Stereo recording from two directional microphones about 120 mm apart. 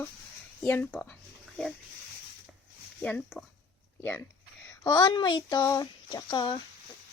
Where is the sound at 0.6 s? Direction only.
15° left (ahead or behind).